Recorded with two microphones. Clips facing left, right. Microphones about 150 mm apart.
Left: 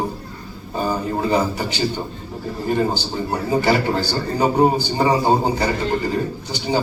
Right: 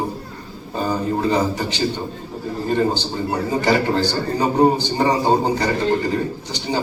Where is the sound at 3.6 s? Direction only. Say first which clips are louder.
Right 1 dB; 10° left (ahead or behind).